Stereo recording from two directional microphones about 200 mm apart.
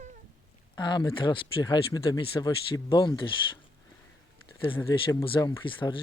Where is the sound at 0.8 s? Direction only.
20° left (ahead or behind).